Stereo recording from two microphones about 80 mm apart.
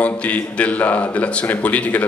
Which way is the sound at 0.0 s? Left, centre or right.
Centre.